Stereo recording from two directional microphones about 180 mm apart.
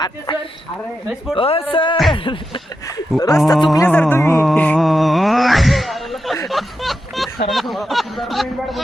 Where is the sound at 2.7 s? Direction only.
20° left (ahead or behind).